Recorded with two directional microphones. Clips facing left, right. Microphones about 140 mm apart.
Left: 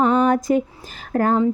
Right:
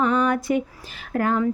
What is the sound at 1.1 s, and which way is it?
Speech, 35° left (ahead or behind).